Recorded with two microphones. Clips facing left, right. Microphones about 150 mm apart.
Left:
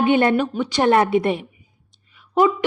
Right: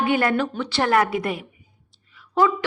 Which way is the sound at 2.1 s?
20° left (ahead or behind).